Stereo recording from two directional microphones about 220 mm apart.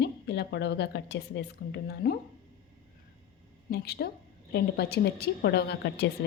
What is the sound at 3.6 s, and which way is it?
A woman's voice, 45° left (ahead or behind).